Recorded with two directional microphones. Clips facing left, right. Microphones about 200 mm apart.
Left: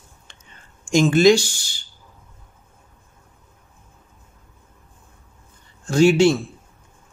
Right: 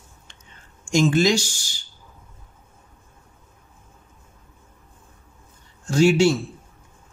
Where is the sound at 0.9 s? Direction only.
55° left (ahead or behind).